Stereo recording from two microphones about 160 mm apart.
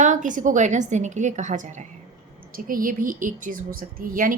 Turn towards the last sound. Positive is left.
turn(degrees=-60)  # may be behind; listen again after turning